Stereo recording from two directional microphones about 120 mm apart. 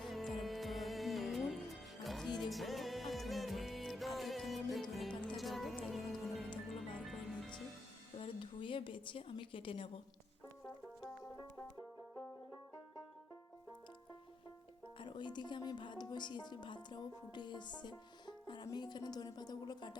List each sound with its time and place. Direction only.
0.0 s music: centre (ahead or behind)
8.2 s a sound: 45° left (ahead or behind)
14.9 s speech: 40° left (ahead or behind)